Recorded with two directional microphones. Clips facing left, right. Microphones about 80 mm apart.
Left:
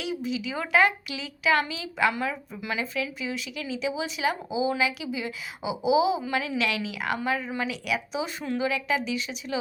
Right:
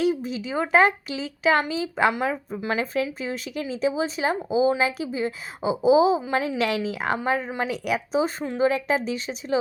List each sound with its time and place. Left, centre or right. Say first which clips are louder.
0.0 s speech: right 6 dB; right
7.7 s speech: right 5 dB; right